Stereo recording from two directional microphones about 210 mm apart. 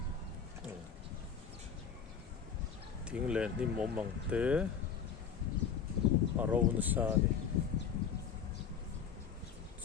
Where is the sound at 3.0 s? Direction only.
5° right (ahead or behind).